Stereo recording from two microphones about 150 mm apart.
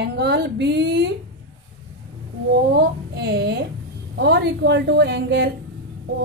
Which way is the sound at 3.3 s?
90° right.